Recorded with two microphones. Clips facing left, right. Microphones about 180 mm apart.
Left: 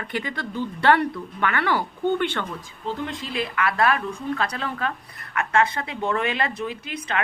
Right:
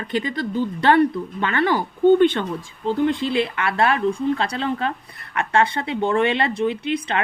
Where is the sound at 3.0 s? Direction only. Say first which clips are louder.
Right 9 dB; 30° right (ahead or behind).